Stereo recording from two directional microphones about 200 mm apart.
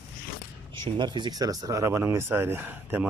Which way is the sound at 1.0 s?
20° right (ahead or behind).